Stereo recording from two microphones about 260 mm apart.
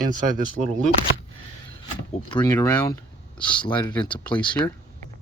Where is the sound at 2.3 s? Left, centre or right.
Centre.